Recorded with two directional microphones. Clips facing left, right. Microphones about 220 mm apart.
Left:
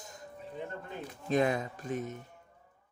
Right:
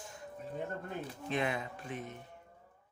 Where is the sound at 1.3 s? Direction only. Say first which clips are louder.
Left 7 dB; 40° left (ahead or behind).